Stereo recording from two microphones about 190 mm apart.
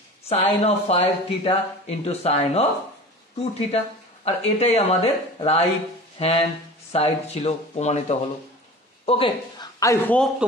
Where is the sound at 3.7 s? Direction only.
35° left (ahead or behind).